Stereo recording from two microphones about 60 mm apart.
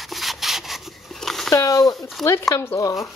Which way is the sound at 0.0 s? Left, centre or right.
Centre.